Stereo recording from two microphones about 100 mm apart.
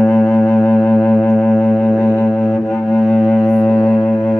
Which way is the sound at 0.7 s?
5° left (ahead or behind).